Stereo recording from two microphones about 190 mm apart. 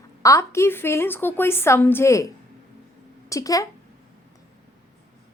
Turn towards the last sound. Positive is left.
turn(degrees=20)  # may be behind; listen again after turning